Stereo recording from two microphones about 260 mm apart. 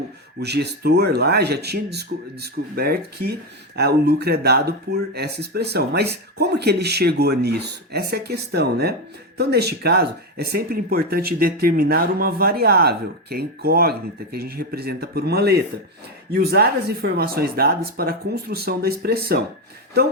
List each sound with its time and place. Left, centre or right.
0.3 s speech: right